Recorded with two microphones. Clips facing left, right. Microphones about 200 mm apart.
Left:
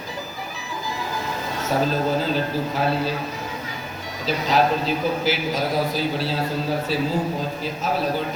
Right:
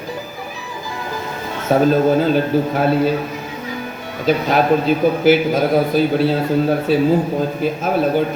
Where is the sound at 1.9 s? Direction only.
55° right (ahead or behind).